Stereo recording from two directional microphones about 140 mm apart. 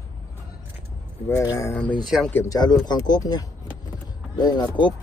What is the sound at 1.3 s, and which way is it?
Speech, 20° left (ahead or behind).